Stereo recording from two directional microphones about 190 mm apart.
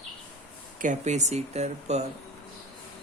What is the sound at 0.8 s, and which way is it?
Speech, 40° right (ahead or behind).